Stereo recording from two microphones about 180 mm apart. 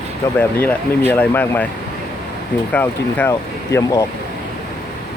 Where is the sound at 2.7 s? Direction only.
10° left (ahead or behind).